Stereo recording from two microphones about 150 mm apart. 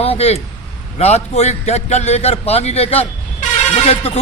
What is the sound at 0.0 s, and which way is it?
A man's voice, 40° left (ahead or behind).